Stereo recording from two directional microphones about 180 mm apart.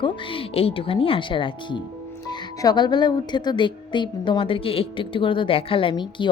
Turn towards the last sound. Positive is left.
turn(degrees=25)  # may be behind; listen again after turning